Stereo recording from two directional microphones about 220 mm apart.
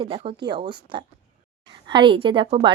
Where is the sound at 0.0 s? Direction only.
25° right (ahead or behind).